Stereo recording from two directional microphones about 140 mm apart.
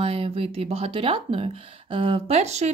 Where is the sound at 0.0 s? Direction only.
45° right (ahead or behind).